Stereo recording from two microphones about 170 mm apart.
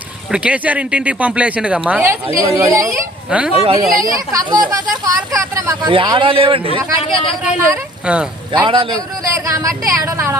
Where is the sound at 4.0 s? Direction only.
20° right (ahead or behind).